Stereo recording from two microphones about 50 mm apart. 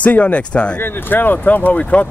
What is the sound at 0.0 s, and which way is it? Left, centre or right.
Speech, left.